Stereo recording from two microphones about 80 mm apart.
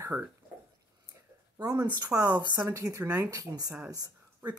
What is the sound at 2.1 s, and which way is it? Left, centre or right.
Speech, centre.